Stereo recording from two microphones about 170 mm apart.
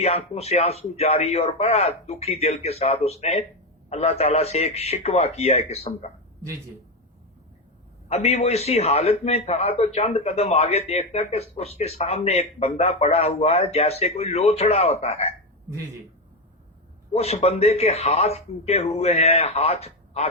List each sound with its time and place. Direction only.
0.0 s a man's voice: 40° left (ahead or behind)
8.1 s a man's voice: 40° left (ahead or behind)
17.2 s a man's voice: 40° left (ahead or behind)